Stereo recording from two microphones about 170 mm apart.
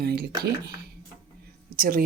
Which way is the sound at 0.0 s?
70° right (ahead or behind).